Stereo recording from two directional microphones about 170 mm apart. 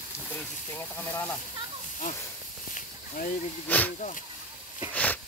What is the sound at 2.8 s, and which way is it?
Snake, 50° left (ahead or behind).